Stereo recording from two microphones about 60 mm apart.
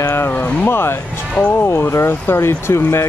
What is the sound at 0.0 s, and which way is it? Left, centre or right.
Speech, left.